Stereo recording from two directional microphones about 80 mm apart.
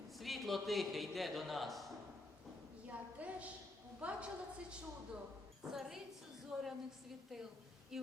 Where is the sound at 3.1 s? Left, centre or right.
Centre.